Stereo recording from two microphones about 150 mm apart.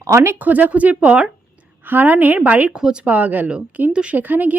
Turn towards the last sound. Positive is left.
turn(degrees=-10)  # may be behind; listen again after turning